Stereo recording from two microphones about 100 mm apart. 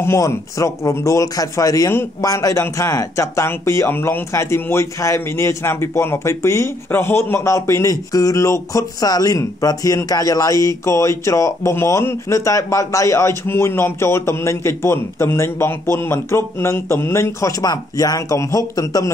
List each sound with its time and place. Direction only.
0.0 s speech: 25° left (ahead or behind)